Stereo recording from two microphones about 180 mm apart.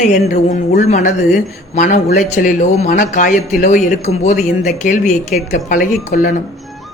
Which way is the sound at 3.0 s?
50° left (ahead or behind).